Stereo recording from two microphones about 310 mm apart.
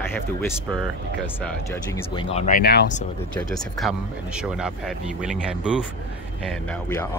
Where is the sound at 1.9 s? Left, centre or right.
Centre; by 3.0 s left.